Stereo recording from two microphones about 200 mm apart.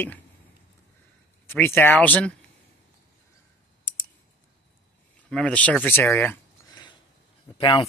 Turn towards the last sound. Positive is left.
turn(degrees=25)  # may be behind; listen again after turning